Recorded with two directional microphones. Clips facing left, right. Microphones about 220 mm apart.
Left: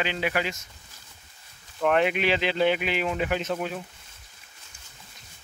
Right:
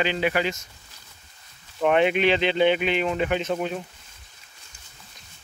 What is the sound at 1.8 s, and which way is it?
Speech, 5° right (ahead or behind).